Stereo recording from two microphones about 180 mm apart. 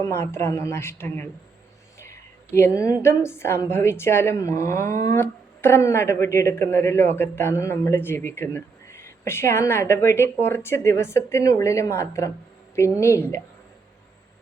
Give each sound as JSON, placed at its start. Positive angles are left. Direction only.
{"t": 0.0, "sound": "a woman's voice", "side_deg": 15}
{"t": 2.0, "sound": "a sound", "side_deg": 15}
{"t": 3.0, "sound": "a woman's voice", "side_deg": 15}